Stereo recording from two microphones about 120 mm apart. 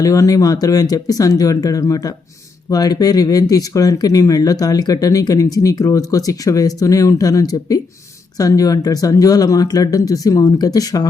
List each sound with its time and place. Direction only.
0.0 s speech: 30° left (ahead or behind)